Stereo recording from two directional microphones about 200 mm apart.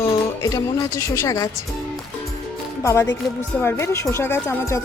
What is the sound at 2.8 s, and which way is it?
Speech, 15° left (ahead or behind).